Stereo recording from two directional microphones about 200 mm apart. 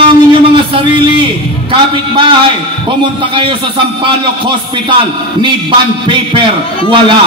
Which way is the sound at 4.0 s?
25° right (ahead or behind).